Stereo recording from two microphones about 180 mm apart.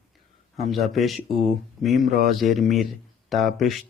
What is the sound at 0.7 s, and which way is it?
Speech, centre (ahead or behind).